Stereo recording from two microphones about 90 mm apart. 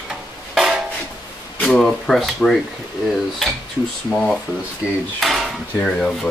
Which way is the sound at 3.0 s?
Centre (ahead or behind).